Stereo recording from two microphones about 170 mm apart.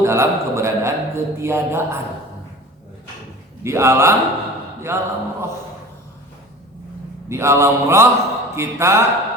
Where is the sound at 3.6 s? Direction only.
15° right (ahead or behind).